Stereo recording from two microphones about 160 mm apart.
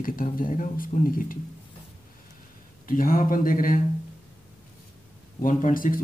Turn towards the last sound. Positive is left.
turn(degrees=60)  # may be behind; listen again after turning